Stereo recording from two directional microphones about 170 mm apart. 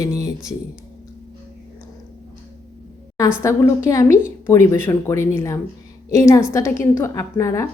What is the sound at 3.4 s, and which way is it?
Speech, 20° left (ahead or behind).